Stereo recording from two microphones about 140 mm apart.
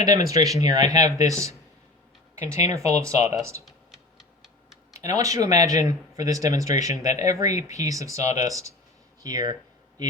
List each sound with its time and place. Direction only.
0.0 s speech: 25° right (ahead or behind)
2.6 s speech: 25° right (ahead or behind)
4.2 s tick-tock: centre (ahead or behind)
4.9 s speech: 25° right (ahead or behind)
8.2 s speech: 55° left (ahead or behind)
8.4 s speech: 25° right (ahead or behind)